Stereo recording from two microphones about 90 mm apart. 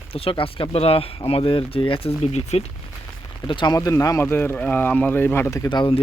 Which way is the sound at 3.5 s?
65° left (ahead or behind).